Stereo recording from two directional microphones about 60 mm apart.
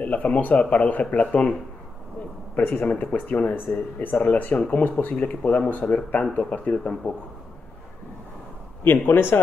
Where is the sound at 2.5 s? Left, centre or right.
Left.